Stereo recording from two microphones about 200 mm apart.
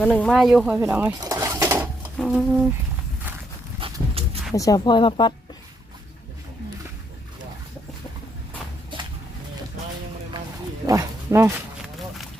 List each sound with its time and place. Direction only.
0.0 s speech: 5° left (ahead or behind); by 1.1 s 10° right (ahead or behind)
1.2 s pigeon: 20° right (ahead or behind)
2.1 s speech: centre (ahead or behind)
3.8 s dog: 25° right (ahead or behind)
4.5 s speech: 15° left (ahead or behind)
8.9 s a sound: 25° right (ahead or behind)
10.8 s speech: 15° right (ahead or behind)